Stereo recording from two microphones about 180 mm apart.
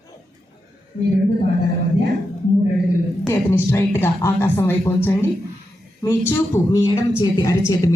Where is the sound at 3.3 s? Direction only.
15° left (ahead or behind).